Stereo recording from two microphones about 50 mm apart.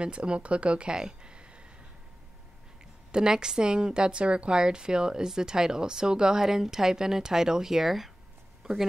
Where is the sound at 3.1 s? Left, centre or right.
Centre.